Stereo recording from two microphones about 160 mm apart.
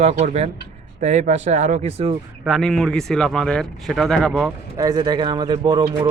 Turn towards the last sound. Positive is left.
turn(degrees=-25)  # may be behind; listen again after turning